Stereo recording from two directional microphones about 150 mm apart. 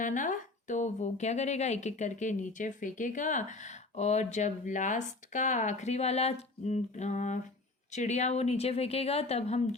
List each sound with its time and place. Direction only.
0.0 s speech: 60° left (ahead or behind); by 9.6 s 45° left (ahead or behind)